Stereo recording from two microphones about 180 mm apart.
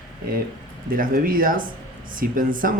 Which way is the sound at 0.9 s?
50° right (ahead or behind).